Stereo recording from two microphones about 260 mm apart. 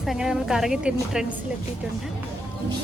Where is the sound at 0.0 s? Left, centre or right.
Centre.